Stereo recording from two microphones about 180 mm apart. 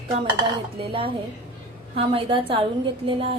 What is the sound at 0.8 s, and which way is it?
A woman's voice, 30° right (ahead or behind).